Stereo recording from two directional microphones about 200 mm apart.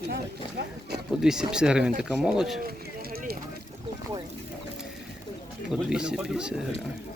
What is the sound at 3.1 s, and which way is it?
Speech, 50° right (ahead or behind).